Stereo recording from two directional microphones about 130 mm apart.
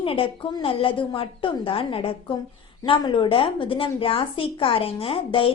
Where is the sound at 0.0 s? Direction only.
45° left (ahead or behind).